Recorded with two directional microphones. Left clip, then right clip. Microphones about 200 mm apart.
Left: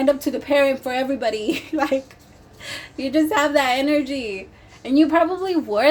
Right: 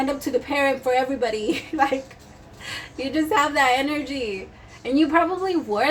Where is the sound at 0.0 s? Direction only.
45° left (ahead or behind).